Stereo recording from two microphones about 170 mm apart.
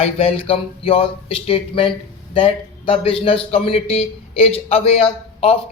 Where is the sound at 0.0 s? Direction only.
35° left (ahead or behind).